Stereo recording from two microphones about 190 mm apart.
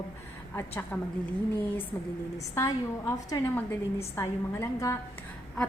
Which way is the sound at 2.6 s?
20° left (ahead or behind).